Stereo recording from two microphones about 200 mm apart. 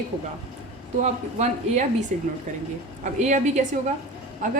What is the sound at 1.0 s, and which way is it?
A woman's voice, 35° right (ahead or behind).